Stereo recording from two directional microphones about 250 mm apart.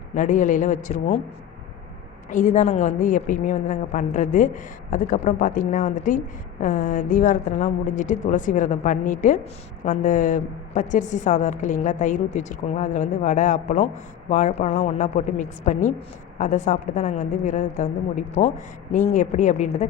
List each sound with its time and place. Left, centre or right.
0.1 s a woman's voice: left
2.3 s a woman's voice: left